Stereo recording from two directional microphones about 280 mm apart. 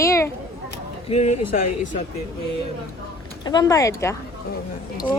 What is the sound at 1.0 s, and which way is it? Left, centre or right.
Speech, left.